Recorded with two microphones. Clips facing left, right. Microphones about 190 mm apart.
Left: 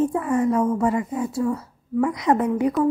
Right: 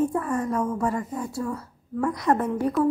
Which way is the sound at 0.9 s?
10° left (ahead or behind).